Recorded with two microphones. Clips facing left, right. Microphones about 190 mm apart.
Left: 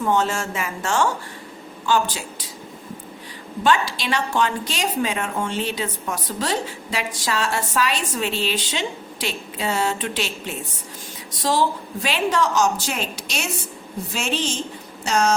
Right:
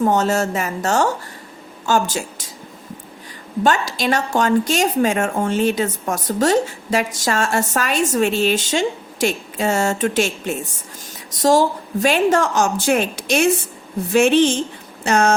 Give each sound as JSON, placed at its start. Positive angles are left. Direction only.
{"t": 0.0, "sound": "a woman's voice", "side_deg": -40}
{"t": 3.6, "sound": "a woman's voice", "side_deg": -45}